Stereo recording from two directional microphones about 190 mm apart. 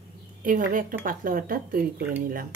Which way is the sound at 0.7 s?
45° right (ahead or behind).